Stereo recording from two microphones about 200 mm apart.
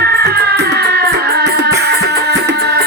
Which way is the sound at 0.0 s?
50° right (ahead or behind).